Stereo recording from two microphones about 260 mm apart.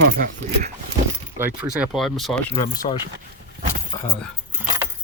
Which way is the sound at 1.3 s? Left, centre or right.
Centre.